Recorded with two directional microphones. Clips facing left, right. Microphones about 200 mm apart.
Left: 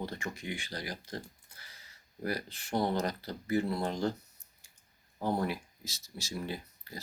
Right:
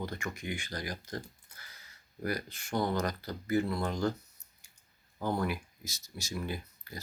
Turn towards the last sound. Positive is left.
turn(degrees=30)  # may be behind; listen again after turning